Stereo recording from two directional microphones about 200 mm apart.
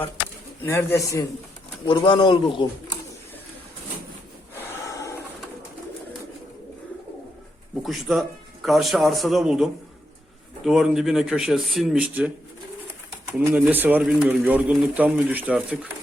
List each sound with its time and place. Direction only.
0.6 s a man's voice: 10° left (ahead or behind)
4.7 s a sound: 15° left (ahead or behind)
7.8 s speech: centre (ahead or behind)
13.4 s a man's voice: 10° right (ahead or behind)